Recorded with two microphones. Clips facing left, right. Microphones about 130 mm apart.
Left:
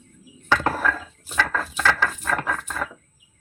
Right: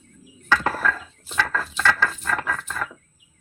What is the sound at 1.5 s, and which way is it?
Ratchet, 10° left (ahead or behind).